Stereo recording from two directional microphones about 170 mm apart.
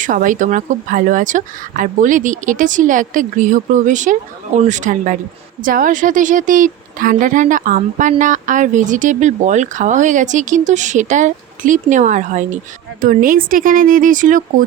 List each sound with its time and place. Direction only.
0.0 s speech: 50° right (ahead or behind)